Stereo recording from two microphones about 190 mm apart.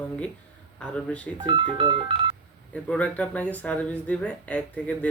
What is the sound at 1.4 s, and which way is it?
Speech, 25° right (ahead or behind).